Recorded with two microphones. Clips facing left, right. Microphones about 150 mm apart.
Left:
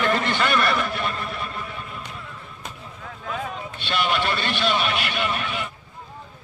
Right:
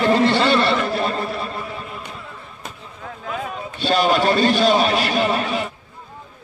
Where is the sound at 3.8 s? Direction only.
40° right (ahead or behind).